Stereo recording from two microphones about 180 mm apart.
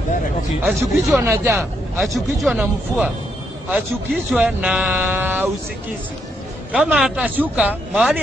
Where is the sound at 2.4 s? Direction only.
5° right (ahead or behind).